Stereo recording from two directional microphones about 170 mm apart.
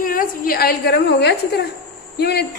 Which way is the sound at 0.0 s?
55° left (ahead or behind).